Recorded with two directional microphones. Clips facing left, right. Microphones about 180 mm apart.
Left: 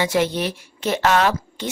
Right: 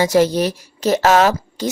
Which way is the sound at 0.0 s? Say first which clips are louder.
Right 6 dB; 40° right (ahead or behind).